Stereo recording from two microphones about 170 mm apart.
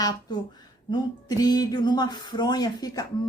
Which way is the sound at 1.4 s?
25° left (ahead or behind).